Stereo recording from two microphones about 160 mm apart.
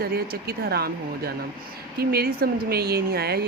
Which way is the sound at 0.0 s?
70° right (ahead or behind).